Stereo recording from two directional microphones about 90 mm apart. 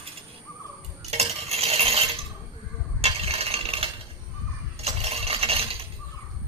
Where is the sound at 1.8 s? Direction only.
90° right.